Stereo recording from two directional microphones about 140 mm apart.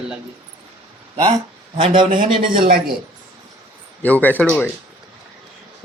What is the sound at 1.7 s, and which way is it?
Speech, 40° right (ahead or behind).